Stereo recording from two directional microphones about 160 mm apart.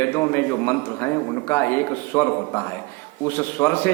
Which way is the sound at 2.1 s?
15° left (ahead or behind).